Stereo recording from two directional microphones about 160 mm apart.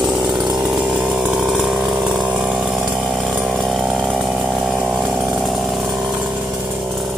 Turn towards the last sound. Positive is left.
turn(degrees=-10)  # may be behind; listen again after turning